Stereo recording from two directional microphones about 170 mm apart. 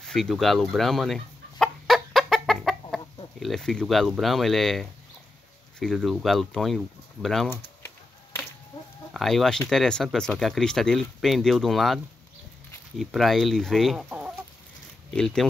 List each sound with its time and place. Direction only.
0.0 s chicken: centre (ahead or behind)
3.3 s speech: centre (ahead or behind)
5.9 s speech: centre (ahead or behind)
7.4 s a sound: 10° left (ahead or behind)
8.7 s chicken: 25° left (ahead or behind)
9.1 s speech: centre (ahead or behind)
14.0 s chicken: 10° right (ahead or behind)
15.1 s speech: 5° left (ahead or behind)